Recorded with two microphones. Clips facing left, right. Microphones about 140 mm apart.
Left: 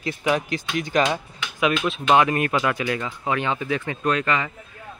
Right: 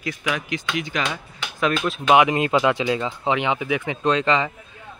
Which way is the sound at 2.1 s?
15° right (ahead or behind).